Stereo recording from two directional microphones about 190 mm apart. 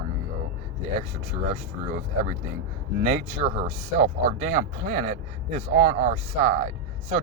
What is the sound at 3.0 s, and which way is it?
Speech, 35° right (ahead or behind).